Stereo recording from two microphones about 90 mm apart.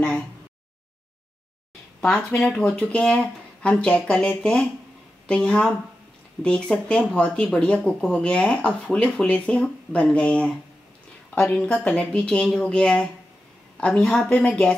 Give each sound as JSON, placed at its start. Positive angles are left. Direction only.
{"t": 2.0, "sound": "speech", "side_deg": 10}
{"t": 11.3, "sound": "a woman's voice", "side_deg": 25}